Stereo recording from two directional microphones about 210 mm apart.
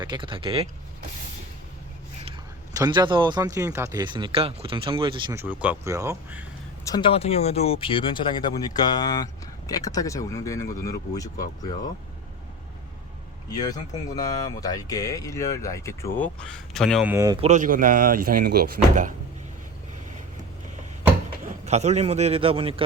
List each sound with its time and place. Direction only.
0.0 s speech: 20° right (ahead or behind)
2.2 s speech: 20° right (ahead or behind)
5.3 s speech: 10° right (ahead or behind)
6.8 s speech: 20° left (ahead or behind)
13.5 s speech: 20° left (ahead or behind); by 17.4 s 15° right (ahead or behind)
17.4 s speech: 35° right (ahead or behind)
21.7 s speech: 30° right (ahead or behind)